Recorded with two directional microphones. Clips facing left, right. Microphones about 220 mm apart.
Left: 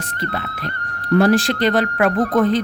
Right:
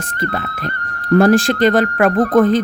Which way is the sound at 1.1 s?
50° right (ahead or behind).